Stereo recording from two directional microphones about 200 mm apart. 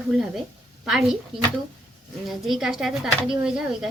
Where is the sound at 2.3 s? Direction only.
Centre (ahead or behind).